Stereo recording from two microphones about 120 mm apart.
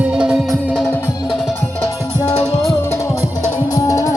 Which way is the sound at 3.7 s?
25° left (ahead or behind).